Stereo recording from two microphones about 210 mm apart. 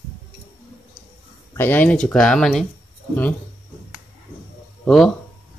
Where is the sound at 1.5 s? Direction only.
10° left (ahead or behind).